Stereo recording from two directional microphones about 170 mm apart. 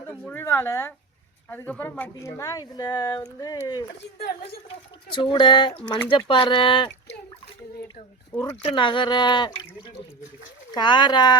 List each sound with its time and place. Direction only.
0.3 s speech: 15° left (ahead or behind)
5.1 s speech: 30° left (ahead or behind)
8.3 s speech: 15° left (ahead or behind)
8.6 s speech: 30° left (ahead or behind)